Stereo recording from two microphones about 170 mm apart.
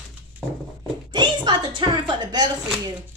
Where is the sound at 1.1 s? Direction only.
25° right (ahead or behind).